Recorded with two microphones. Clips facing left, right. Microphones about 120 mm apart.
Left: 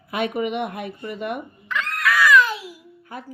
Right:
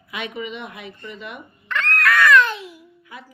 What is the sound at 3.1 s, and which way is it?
Speech, 45° left (ahead or behind).